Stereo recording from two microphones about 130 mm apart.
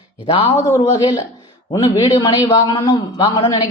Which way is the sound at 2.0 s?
35° left (ahead or behind).